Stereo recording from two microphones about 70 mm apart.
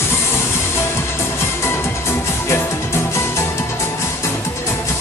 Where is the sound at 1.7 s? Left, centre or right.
Left.